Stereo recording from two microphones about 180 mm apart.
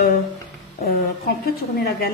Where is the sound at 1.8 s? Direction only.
60° left (ahead or behind).